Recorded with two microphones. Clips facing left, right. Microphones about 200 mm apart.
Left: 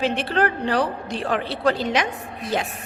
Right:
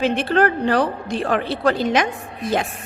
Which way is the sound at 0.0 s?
50° right (ahead or behind).